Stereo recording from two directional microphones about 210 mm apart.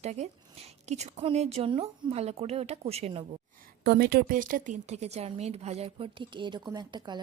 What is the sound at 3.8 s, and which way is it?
A woman's voice, 50° right (ahead or behind).